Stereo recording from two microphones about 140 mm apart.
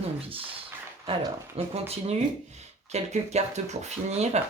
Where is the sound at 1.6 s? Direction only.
45° right (ahead or behind).